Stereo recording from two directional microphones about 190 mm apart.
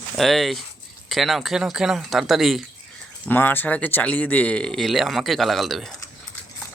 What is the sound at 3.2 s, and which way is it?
Speech, 10° left (ahead or behind).